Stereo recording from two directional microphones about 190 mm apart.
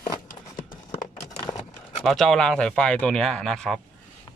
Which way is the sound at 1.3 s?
20° left (ahead or behind).